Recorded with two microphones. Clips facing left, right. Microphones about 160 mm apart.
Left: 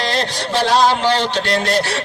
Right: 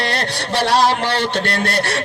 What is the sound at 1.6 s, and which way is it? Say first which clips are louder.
Speech: left 2 dB; 60° right (ahead or behind).